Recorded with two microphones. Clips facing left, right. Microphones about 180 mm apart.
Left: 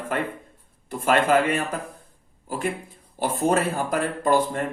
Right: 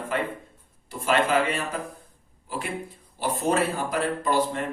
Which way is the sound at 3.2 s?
50° left (ahead or behind).